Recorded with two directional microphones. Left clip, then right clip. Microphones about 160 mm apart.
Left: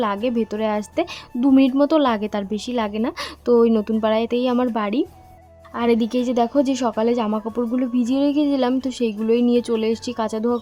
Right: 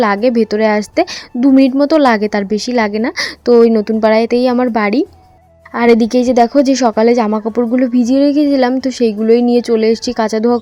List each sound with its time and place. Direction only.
0.0 s a woman's voice: 35° right (ahead or behind)